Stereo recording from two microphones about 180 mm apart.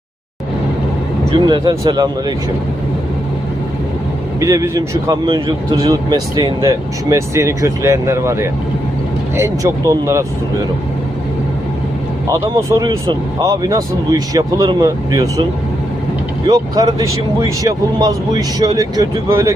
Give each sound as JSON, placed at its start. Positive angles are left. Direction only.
{"t": 1.5, "sound": "a man's voice", "side_deg": -25}
{"t": 4.4, "sound": "speech", "side_deg": -15}
{"t": 12.3, "sound": "a man's voice", "side_deg": -15}
{"t": 16.5, "sound": "a man's voice", "side_deg": -20}